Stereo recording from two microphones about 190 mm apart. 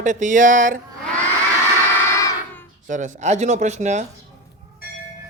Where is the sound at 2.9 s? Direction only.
40° right (ahead or behind).